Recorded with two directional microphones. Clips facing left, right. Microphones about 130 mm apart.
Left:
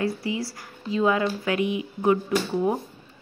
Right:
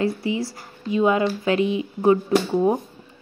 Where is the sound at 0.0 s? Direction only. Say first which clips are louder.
Right 4 dB; 25° right (ahead or behind).